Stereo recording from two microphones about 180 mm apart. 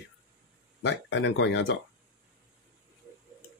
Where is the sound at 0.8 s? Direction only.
85° left.